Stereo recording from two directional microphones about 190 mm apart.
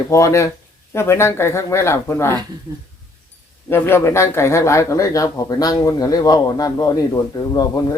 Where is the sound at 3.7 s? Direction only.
15° left (ahead or behind).